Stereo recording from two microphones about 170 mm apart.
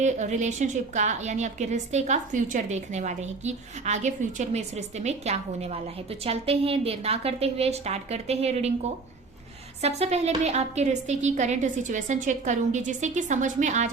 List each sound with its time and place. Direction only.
0.0 s a woman's voice: 45° right (ahead or behind)